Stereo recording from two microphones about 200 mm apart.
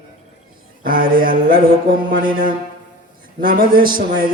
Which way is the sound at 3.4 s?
45° right (ahead or behind).